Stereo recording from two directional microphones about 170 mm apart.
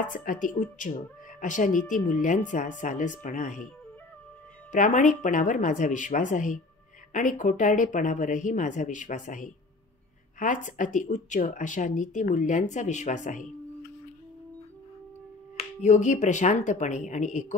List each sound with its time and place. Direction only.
0.0 s a woman's voice: 50° left (ahead or behind)
4.7 s a woman's voice: 50° left (ahead or behind)
15.8 s a woman's voice: 45° left (ahead or behind)